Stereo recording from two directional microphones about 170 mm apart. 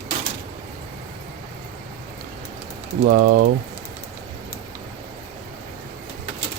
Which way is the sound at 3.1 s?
55° right (ahead or behind).